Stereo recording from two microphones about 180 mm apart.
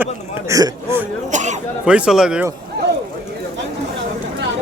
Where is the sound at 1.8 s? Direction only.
5° right (ahead or behind).